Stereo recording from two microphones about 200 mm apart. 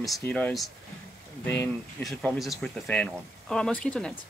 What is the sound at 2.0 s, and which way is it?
Speech, centre (ahead or behind).